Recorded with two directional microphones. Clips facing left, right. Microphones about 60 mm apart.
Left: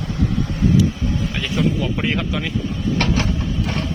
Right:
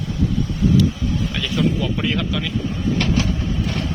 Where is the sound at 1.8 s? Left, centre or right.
Left.